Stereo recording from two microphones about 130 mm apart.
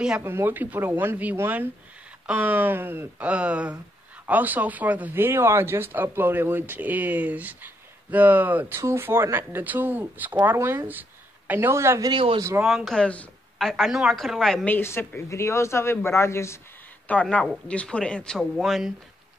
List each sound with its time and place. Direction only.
0.2 s speech: 20° right (ahead or behind)
12.1 s speech: 40° right (ahead or behind)
12.4 s speech: 20° right (ahead or behind)
12.6 s a woman's voice: centre (ahead or behind); by 16.5 s 20° left (ahead or behind)
17.1 s a woman's voice: 10° left (ahead or behind)